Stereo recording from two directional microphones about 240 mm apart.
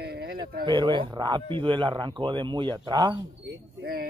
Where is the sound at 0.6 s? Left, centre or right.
Centre.